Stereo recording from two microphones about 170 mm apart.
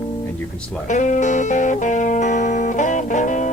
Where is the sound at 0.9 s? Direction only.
45° left (ahead or behind).